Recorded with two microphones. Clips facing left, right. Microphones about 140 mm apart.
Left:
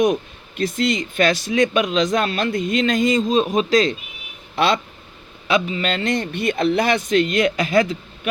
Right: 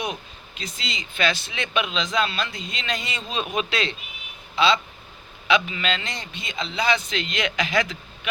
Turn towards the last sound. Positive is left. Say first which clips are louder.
# left 7 dB
turn(degrees=40)  # may be behind; listen again after turning